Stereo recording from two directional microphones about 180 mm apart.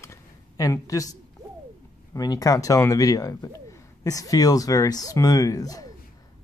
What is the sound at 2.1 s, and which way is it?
Speech, 20° left (ahead or behind).